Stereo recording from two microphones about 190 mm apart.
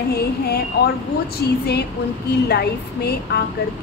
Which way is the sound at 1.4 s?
60° left (ahead or behind).